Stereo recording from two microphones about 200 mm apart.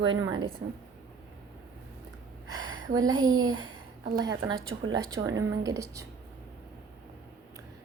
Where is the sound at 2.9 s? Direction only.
20° right (ahead or behind).